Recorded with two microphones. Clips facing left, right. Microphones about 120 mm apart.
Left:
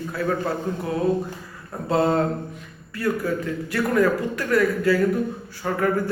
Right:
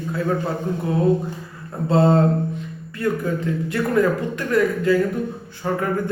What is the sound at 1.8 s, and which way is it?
A man's voice, 25° right (ahead or behind).